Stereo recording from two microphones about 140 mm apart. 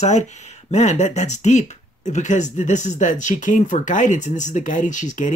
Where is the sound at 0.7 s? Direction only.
55° left (ahead or behind).